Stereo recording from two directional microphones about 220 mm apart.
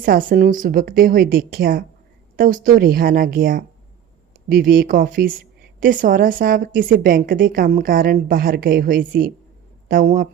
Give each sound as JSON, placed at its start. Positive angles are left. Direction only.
{"t": 0.0, "sound": "a woman's voice", "side_deg": -40}